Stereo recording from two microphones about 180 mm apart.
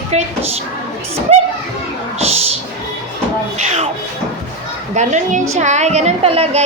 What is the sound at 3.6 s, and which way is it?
Music, 35° right (ahead or behind).